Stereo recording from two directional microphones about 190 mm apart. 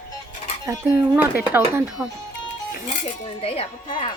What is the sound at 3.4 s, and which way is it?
Speech, 30° left (ahead or behind).